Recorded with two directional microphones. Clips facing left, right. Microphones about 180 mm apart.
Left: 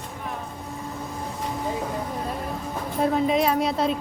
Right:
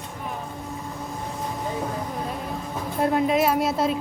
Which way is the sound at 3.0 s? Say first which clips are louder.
Right 1 dB; 5° right (ahead or behind).